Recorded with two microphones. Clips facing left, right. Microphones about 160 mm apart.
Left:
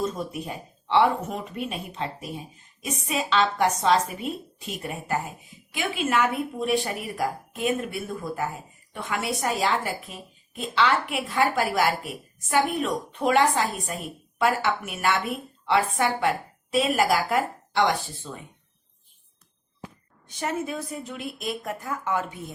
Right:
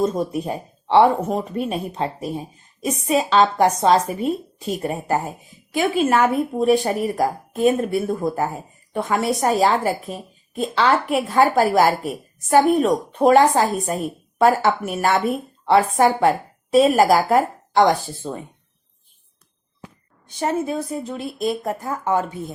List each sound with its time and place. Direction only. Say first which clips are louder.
0.0 s speech: right 8 dB; 40° right (ahead or behind)
20.2 s speech: right 7 dB; 30° right (ahead or behind)